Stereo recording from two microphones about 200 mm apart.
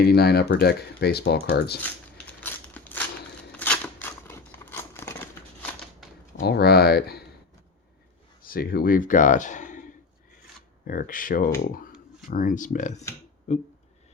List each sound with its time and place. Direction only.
0.0 s speech: 55° left (ahead or behind)
1.8 s a sound: 10° left (ahead or behind)
3.5 s scissors: 10° left (ahead or behind)
6.4 s speech: 55° left (ahead or behind)
8.4 s speech: 50° left (ahead or behind)
10.8 s speech: 45° left (ahead or behind)